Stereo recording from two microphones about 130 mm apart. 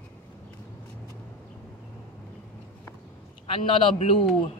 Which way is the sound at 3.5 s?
40° left (ahead or behind).